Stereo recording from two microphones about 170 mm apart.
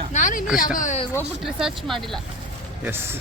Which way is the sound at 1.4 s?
Centre (ahead or behind).